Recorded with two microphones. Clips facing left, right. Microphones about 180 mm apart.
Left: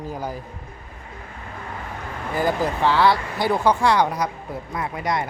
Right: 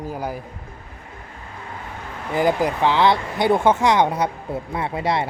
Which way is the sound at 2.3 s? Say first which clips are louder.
Right 3 dB; 20° right (ahead or behind).